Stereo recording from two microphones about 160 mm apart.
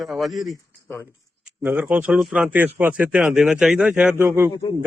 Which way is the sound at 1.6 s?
10° right (ahead or behind).